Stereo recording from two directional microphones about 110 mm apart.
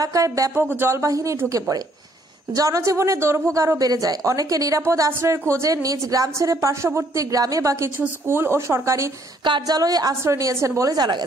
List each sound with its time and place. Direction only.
0.0 s a woman's voice: 30° right (ahead or behind)
9.4 s a woman's voice: 40° right (ahead or behind)